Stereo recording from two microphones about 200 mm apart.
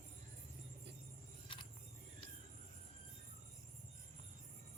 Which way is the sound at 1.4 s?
25° left (ahead or behind).